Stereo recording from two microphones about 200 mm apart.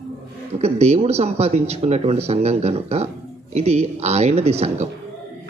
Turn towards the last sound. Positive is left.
turn(degrees=-35)  # may be behind; listen again after turning